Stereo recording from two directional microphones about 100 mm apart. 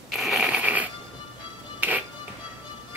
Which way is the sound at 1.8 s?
15° right (ahead or behind).